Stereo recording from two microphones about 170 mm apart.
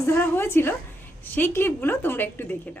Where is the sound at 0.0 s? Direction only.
15° left (ahead or behind).